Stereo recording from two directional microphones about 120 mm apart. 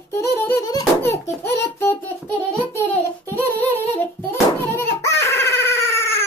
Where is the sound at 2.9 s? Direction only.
15° left (ahead or behind).